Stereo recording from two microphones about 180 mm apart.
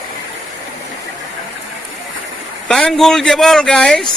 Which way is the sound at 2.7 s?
5° left (ahead or behind).